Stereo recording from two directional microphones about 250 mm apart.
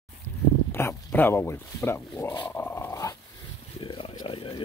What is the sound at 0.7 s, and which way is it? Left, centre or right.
Speech, centre.